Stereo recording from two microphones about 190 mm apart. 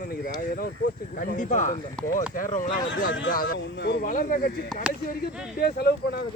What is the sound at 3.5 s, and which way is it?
Speech, 60° left (ahead or behind).